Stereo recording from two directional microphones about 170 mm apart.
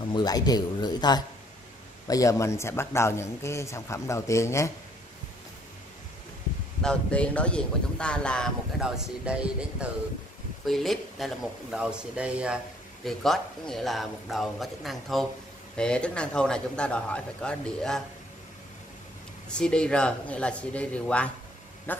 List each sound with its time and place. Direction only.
0.1 s a man's voice: 25° left (ahead or behind)
6.8 s speech: 5° left (ahead or behind)
19.5 s a man's voice: 5° left (ahead or behind)